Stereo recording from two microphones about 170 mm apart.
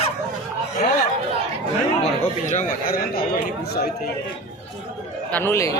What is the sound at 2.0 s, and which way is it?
Speech, 45° left (ahead or behind).